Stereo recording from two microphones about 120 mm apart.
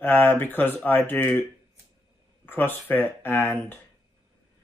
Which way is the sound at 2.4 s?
20° left (ahead or behind).